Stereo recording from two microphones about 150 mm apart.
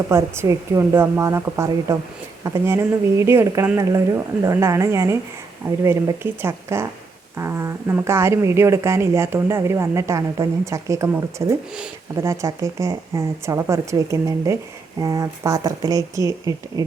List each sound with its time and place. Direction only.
0.1 s a woman's voice: 20° right (ahead or behind)